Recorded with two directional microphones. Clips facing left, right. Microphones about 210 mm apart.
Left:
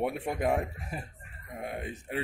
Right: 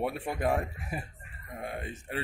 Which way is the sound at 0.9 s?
5° right (ahead or behind).